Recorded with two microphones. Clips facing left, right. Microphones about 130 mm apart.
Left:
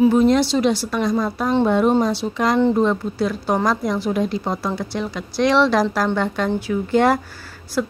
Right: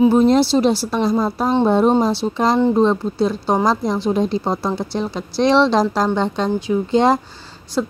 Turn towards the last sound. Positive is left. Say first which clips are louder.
# right 1 dB
turn(degrees=-25)  # may be behind; listen again after turning